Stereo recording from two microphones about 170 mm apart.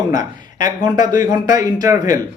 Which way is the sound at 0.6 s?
20° right (ahead or behind).